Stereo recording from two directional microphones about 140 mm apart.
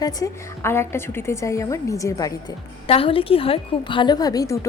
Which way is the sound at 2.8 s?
40° left (ahead or behind).